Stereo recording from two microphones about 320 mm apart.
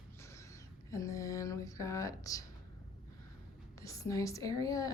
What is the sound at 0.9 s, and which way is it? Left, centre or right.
Speech, centre.